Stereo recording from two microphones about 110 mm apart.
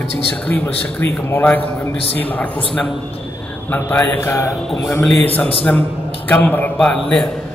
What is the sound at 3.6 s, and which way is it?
Speech, 15° left (ahead or behind).